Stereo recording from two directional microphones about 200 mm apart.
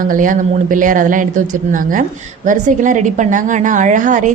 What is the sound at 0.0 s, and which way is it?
Speech, 40° right (ahead or behind).